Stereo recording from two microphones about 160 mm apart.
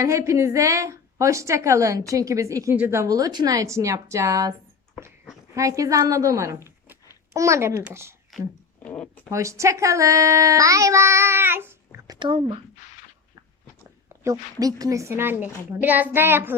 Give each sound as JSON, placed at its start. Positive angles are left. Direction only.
{"t": 0.0, "sound": "a child's voice", "side_deg": -20}
{"t": 5.5, "sound": "a child's voice", "side_deg": -20}
{"t": 8.3, "sound": "a sound", "side_deg": 0}
{"t": 8.8, "sound": "speech", "side_deg": 10}
{"t": 9.3, "sound": "a child's voice", "side_deg": -20}
{"t": 12.1, "sound": "speech", "side_deg": -30}
{"t": 14.3, "sound": "a woman's voice", "side_deg": -20}